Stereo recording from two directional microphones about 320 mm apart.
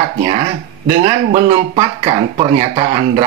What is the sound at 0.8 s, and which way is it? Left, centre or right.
Speech, centre.